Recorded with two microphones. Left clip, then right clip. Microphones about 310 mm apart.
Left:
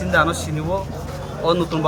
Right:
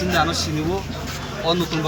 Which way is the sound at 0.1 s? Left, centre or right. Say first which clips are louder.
Left 4 dB; left.